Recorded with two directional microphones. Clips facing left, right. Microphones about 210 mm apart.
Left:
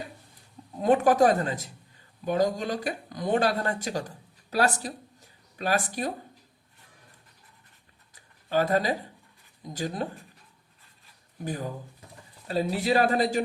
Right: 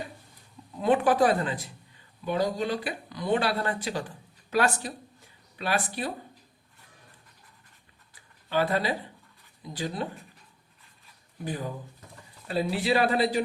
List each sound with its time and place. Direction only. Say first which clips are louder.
0.8 s speech: left 2 dB; 45° left (ahead or behind)
8.1 s a sound: left 2 dB; 45° left (ahead or behind)
9.6 s speech: left 1 dB; 45° left (ahead or behind)
11.4 s speech: left 1 dB; 45° left (ahead or behind)